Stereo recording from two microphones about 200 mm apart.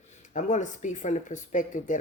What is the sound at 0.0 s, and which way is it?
Speech, 35° left (ahead or behind).